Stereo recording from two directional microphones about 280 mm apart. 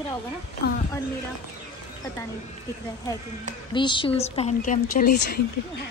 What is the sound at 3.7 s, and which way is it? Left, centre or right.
Speech, centre.